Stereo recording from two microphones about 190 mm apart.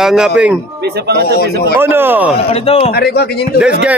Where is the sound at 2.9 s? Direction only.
55° left (ahead or behind).